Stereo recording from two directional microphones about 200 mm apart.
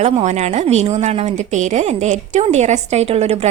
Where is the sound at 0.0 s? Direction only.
35° right (ahead or behind).